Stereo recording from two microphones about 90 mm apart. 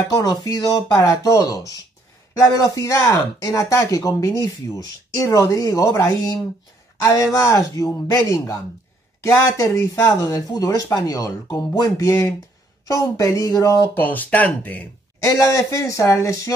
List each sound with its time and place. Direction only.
0.2 s speech: 45° left (ahead or behind)
0.9 s speech: 40° left (ahead or behind)
13.9 s speech: 20° left (ahead or behind)
15.2 s speech: 35° left (ahead or behind)